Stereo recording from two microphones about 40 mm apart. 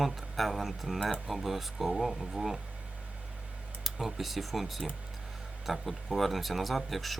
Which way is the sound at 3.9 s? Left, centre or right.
Centre.